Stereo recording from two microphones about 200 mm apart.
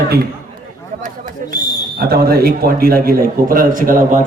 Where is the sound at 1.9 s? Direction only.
50° right (ahead or behind).